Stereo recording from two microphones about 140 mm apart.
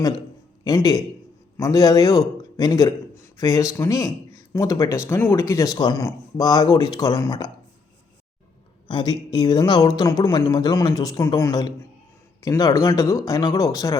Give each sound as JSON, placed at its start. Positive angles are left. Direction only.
{"t": 0.6, "sound": "a man's voice", "side_deg": 25}
{"t": 8.9, "sound": "speech", "side_deg": 35}